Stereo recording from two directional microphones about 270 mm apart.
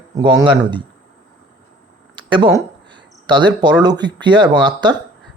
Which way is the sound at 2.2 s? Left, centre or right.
Centre.